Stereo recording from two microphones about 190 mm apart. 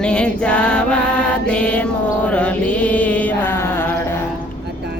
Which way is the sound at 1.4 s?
5° left (ahead or behind).